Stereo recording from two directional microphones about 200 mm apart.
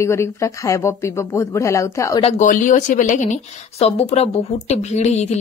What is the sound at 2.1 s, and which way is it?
A woman's voice, 35° left (ahead or behind).